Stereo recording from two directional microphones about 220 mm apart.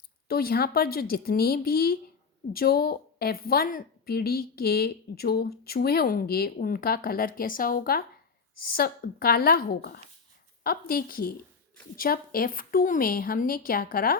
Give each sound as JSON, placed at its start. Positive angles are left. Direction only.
{"t": 0.3, "sound": "a woman's voice", "side_deg": 45}